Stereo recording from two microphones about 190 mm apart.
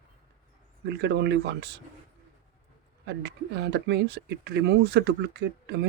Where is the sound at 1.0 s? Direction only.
65° right (ahead or behind).